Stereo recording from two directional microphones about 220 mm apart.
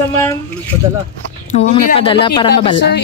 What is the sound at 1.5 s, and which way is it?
A woman's voice, 30° left (ahead or behind).